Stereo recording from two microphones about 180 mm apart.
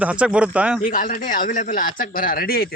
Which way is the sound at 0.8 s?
50° left (ahead or behind).